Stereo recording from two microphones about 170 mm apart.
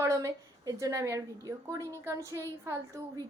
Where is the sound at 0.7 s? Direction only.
20° right (ahead or behind).